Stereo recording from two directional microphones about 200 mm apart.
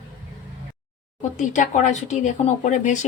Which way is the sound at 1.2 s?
40° left (ahead or behind).